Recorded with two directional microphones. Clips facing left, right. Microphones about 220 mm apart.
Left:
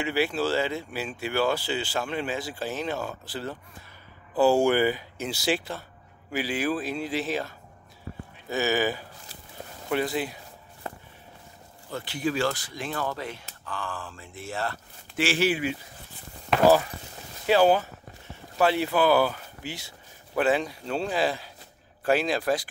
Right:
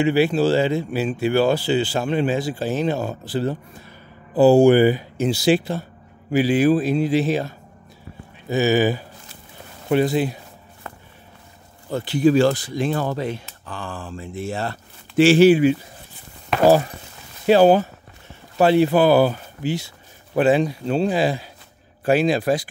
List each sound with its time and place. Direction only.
0.0 s speech: 25° right (ahead or behind)
4.6 s speech: 25° right (ahead or behind)
11.9 s speech: 35° right (ahead or behind)
17.5 s speech: 30° right (ahead or behind)